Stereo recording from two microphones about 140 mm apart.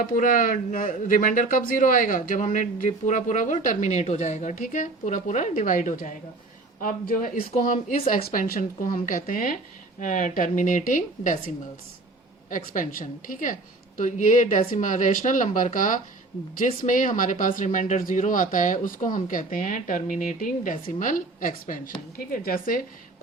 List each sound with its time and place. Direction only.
0.0 s speech: 85° left; by 7.9 s 65° left (ahead or behind)
8.3 s speech: 85° left
10.0 s speech: 70° left (ahead or behind)
12.5 s speech: 70° left (ahead or behind); by 22.8 s 90° left